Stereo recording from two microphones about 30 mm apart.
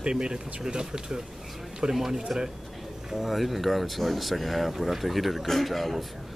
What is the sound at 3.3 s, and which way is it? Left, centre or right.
Speech, centre.